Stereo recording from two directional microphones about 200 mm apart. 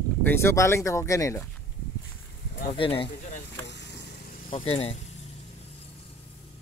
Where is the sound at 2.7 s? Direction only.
25° left (ahead or behind).